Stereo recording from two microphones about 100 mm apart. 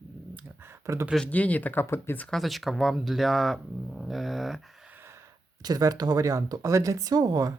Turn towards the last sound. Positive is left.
turn(degrees=-40)  # may be behind; listen again after turning